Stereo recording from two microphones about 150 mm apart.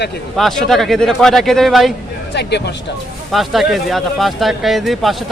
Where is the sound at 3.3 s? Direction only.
Centre (ahead or behind).